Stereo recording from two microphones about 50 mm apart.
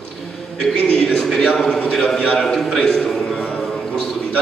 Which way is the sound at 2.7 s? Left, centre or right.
Centre.